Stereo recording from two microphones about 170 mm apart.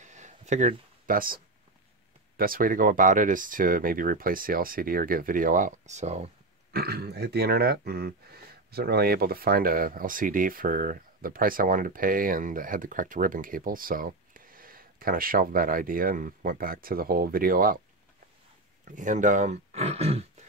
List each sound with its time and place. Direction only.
0.0 s a sound: 45° right (ahead or behind)
2.3 s speech: 55° right (ahead or behind); by 6.3 s 40° right (ahead or behind)
6.7 s speech: 65° right (ahead or behind)
18.9 s speech: 50° right (ahead or behind)